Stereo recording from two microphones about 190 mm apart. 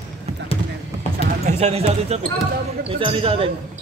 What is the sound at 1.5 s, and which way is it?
Speech, 35° right (ahead or behind).